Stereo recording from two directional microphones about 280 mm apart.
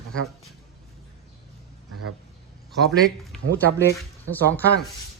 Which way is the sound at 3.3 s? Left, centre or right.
Centre.